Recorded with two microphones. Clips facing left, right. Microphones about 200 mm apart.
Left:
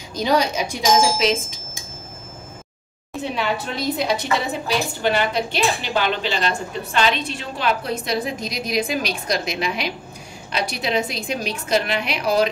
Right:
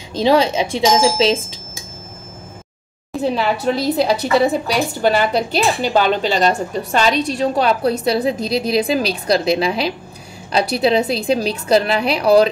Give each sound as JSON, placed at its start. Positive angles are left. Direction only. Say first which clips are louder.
{"t": 0.1, "sound": "speech", "louder": "right 5 dB", "side_deg": -25}
{"t": 3.2, "sound": "speech", "louder": "right 6 dB", "side_deg": -35}